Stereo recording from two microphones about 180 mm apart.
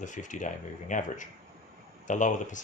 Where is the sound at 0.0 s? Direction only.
45° left (ahead or behind).